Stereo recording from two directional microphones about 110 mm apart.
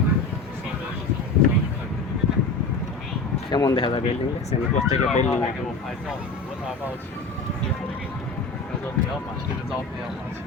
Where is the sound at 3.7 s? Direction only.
50° left (ahead or behind).